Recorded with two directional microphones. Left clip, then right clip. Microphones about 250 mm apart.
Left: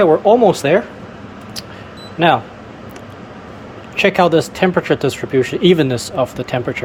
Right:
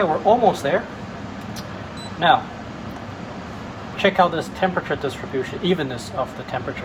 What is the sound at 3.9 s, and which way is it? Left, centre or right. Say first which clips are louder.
Speech: left 5 dB; left.